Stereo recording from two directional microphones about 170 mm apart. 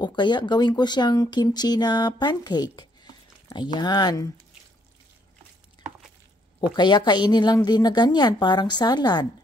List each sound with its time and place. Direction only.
0.0 s speech: 25° left (ahead or behind)
6.7 s speech: 25° left (ahead or behind)